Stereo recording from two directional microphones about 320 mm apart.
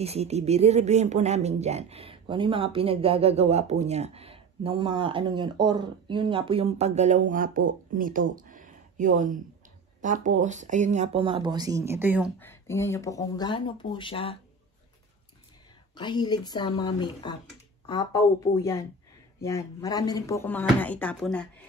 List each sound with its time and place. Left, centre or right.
0.0 s speech: centre
12.4 s speech: centre
16.0 s speech: centre